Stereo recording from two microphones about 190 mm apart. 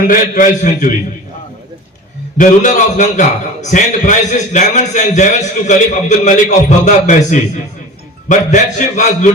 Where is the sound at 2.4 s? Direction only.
40° left (ahead or behind).